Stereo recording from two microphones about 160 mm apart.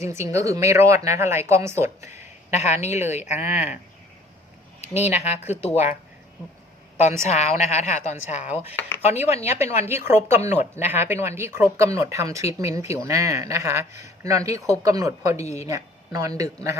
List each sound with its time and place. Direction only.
0.0 s speech: 15° right (ahead or behind)
2.5 s speech: 45° left (ahead or behind)
5.1 s speech: 45° left (ahead or behind)
7.3 s speech: 45° left (ahead or behind)
10.1 s speech: 15° right (ahead or behind)
10.6 s speech: 45° left (ahead or behind)
10.9 s speech: 15° right (ahead or behind)